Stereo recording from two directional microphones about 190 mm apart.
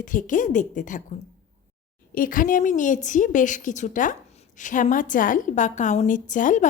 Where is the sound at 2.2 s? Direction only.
45° left (ahead or behind).